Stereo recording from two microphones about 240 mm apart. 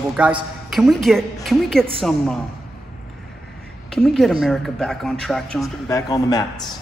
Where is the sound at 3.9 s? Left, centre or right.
Centre.